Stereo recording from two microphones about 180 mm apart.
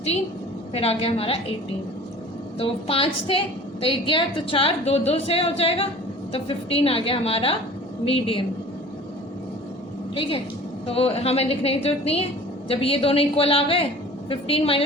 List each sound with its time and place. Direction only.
0.7 s a woman's voice: 35° left (ahead or behind)
2.6 s a woman's voice: 30° left (ahead or behind)
10.2 s a woman's voice: 30° left (ahead or behind)